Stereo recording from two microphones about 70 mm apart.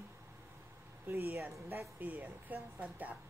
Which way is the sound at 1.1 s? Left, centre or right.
Right.